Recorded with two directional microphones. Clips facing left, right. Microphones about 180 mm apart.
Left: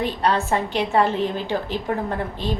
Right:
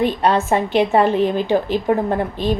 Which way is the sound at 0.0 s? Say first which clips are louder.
Right 5 dB; 20° right (ahead or behind).